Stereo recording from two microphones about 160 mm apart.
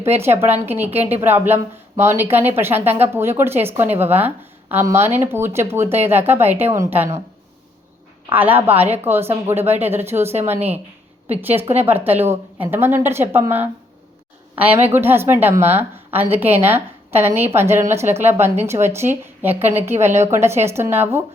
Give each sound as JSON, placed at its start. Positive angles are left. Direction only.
{"t": 0.0, "sound": "a woman's voice", "side_deg": -15}
{"t": 8.3, "sound": "a woman's voice", "side_deg": -10}
{"t": 11.3, "sound": "a woman's voice", "side_deg": -15}
{"t": 14.8, "sound": "a woman's voice", "side_deg": -15}